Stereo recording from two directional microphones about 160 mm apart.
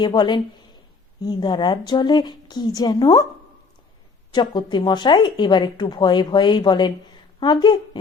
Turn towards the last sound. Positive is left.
turn(degrees=25)  # may be behind; listen again after turning